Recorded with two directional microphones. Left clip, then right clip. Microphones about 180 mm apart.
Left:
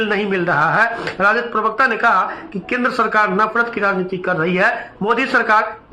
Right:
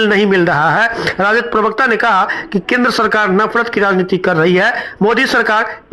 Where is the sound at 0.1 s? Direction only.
40° right (ahead or behind).